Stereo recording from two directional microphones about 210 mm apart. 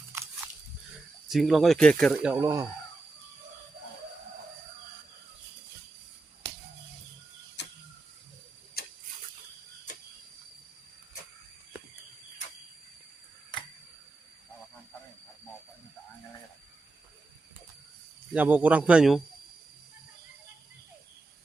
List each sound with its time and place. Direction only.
0.1 s a sound: 10° right (ahead or behind)
1.3 s speech: centre (ahead or behind)
2.3 s speech: 15° right (ahead or behind)
18.3 s speech: 5° right (ahead or behind)